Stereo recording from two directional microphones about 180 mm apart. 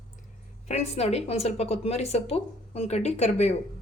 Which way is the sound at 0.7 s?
35° left (ahead or behind).